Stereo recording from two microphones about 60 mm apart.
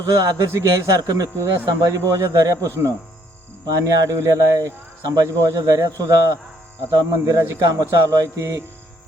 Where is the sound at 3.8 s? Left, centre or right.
Right.